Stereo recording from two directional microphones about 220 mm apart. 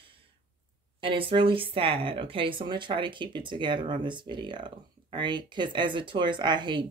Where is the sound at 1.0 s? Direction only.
25° right (ahead or behind).